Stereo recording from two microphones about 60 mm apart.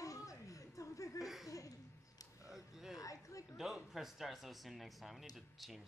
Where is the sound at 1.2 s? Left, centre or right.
Centre.